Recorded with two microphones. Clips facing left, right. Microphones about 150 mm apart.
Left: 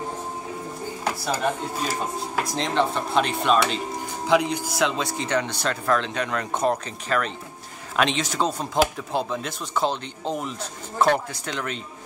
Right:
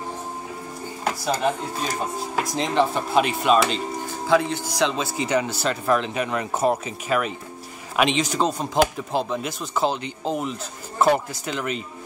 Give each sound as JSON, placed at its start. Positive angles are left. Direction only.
{"t": 1.4, "sound": "speech", "side_deg": 0}
{"t": 4.3, "sound": "speech", "side_deg": 15}
{"t": 4.7, "sound": "speech", "side_deg": 0}